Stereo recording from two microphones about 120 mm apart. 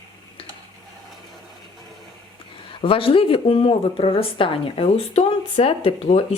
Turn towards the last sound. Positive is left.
turn(degrees=60)  # may be behind; listen again after turning